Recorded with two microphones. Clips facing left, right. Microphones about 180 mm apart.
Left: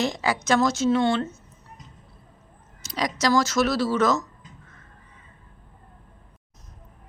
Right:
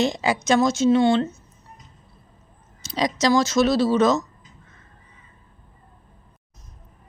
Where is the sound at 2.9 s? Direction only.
25° right (ahead or behind).